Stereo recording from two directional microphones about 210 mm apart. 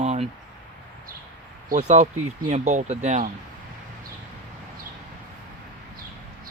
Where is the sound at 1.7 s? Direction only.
35° right (ahead or behind).